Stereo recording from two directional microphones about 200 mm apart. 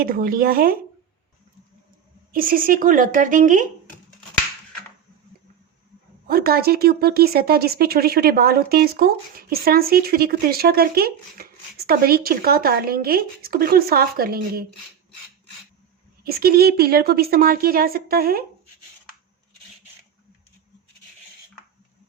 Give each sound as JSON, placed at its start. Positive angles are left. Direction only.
{"t": 0.0, "sound": "speech", "side_deg": -45}
{"t": 2.3, "sound": "speech", "side_deg": -45}
{"t": 6.2, "sound": "speech", "side_deg": -50}
{"t": 16.2, "sound": "speech", "side_deg": -50}